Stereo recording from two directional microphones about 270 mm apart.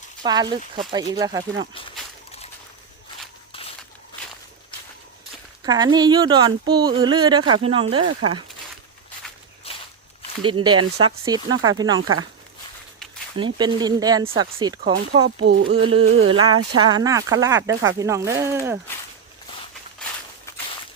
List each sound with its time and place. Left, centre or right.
0.2 s speech: centre
3.5 s walk: centre
5.6 s speech: centre
8.2 s music: centre
9.7 s walk: left
10.4 s speech: centre
13.4 s speech: centre
15.4 s a sound: right
15.7 s music: right
16.0 s a sound: right
16.3 s speech: centre